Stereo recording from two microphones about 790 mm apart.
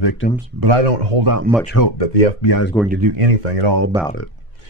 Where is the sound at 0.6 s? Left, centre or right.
Right.